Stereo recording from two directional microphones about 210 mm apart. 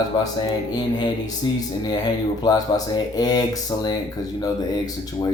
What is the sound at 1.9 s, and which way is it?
Speech, 20° left (ahead or behind).